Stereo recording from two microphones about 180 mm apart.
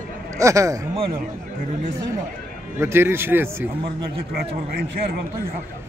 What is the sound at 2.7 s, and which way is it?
Speech, 15° right (ahead or behind).